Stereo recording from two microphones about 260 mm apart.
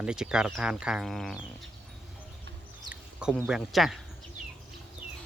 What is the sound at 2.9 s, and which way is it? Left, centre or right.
Speech, centre.